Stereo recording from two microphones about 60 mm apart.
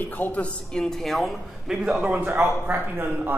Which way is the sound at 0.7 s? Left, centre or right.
Centre.